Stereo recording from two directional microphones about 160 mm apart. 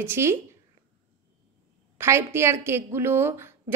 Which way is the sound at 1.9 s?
15° right (ahead or behind).